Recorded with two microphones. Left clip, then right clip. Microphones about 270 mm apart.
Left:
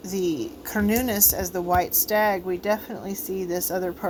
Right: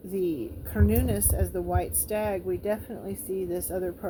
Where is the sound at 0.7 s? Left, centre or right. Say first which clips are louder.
Left 4 dB; left.